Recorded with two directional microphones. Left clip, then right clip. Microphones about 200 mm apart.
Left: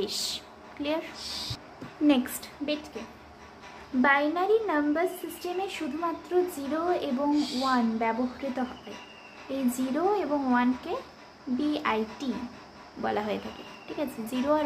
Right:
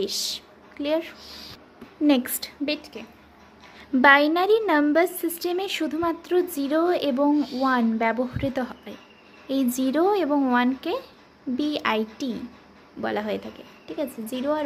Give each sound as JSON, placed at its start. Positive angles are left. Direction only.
{"t": 0.0, "sound": "a woman's voice", "side_deg": -35}
{"t": 4.0, "sound": "a woman's voice", "side_deg": -55}